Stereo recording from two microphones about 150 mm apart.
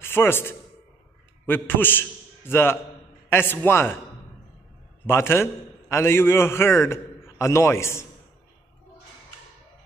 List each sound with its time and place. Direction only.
0.0 s a man's voice: 15° left (ahead or behind)
5.0 s a man's voice: 15° left (ahead or behind)